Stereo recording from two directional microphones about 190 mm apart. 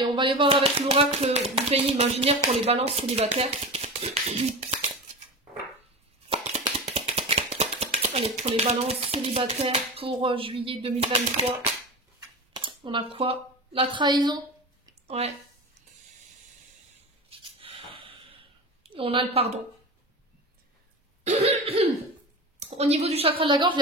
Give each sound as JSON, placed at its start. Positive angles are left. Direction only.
{"t": 0.0, "sound": "speech", "side_deg": -25}
{"t": 6.2, "sound": "a sound", "side_deg": -35}
{"t": 6.6, "sound": "speech", "side_deg": -35}
{"t": 12.5, "sound": "speech", "side_deg": -25}
{"t": 15.0, "sound": "speech", "side_deg": -35}
{"t": 17.4, "sound": "snort", "side_deg": -30}
{"t": 18.9, "sound": "speech", "side_deg": -30}
{"t": 21.2, "sound": "cough", "side_deg": -35}
{"t": 22.6, "sound": "speech", "side_deg": -35}